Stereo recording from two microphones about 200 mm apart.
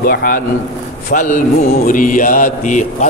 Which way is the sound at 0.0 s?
45° left (ahead or behind).